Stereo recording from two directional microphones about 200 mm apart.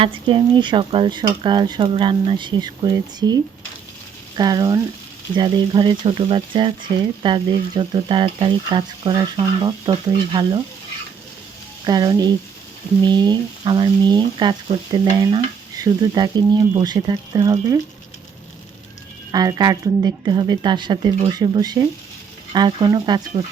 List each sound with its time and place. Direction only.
0.0 s speech: 25° right (ahead or behind)
11.9 s speech: 20° right (ahead or behind)
19.3 s speech: 20° right (ahead or behind)